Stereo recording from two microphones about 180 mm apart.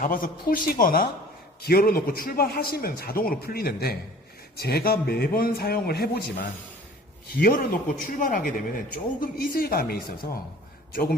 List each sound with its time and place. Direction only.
0.0 s a man's voice: 50° left (ahead or behind)
7.3 s a man's voice: 50° left (ahead or behind)